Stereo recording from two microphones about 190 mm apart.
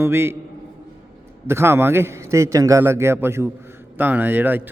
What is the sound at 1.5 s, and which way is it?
A man's voice, 15° right (ahead or behind).